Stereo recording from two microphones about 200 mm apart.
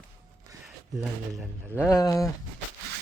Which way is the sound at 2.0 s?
15° left (ahead or behind).